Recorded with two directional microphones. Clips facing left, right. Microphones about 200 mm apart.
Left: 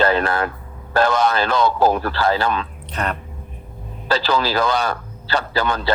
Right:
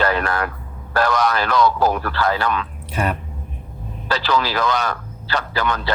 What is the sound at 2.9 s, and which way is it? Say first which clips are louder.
Speech: right 2 dB; 10° right (ahead or behind).